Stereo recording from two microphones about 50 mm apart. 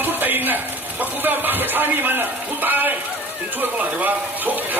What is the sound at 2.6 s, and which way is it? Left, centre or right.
Speech, right.